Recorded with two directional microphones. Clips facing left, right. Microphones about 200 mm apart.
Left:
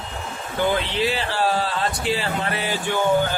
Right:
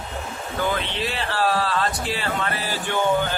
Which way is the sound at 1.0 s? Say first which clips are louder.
Left 2 dB; 25° left (ahead or behind).